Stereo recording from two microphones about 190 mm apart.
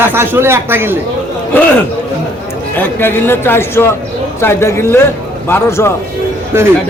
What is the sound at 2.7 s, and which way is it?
A man's voice, 10° left (ahead or behind).